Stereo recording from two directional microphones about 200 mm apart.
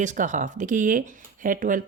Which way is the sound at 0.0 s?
40° right (ahead or behind).